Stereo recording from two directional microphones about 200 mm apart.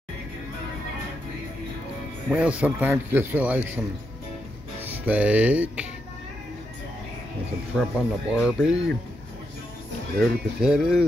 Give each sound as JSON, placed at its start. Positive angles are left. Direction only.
{"t": 2.2, "sound": "speech", "side_deg": -5}
{"t": 4.8, "sound": "speech", "side_deg": -10}
{"t": 7.7, "sound": "speech", "side_deg": 0}
{"t": 10.2, "sound": "speech", "side_deg": 0}